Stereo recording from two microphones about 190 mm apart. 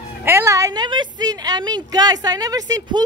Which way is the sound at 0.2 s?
10° right (ahead or behind).